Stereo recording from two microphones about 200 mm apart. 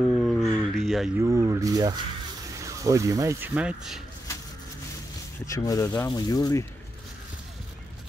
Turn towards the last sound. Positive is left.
turn(degrees=20)  # may be behind; listen again after turning